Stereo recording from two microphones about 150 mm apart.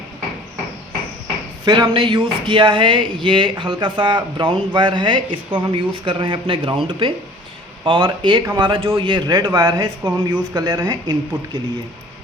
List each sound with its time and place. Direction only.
1.6 s speech: 35° right (ahead or behind)